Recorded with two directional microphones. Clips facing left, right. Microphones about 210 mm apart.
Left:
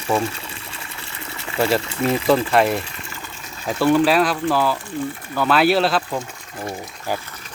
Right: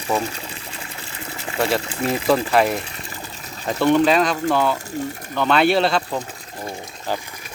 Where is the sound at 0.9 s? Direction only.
35° right (ahead or behind).